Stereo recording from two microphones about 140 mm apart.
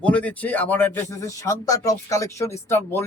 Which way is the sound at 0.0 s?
10° left (ahead or behind).